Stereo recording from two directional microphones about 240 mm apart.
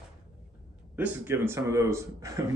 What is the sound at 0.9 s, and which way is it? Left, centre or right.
Speech, centre.